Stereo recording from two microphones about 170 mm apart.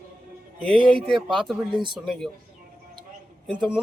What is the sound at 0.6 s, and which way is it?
Speech, 30° right (ahead or behind).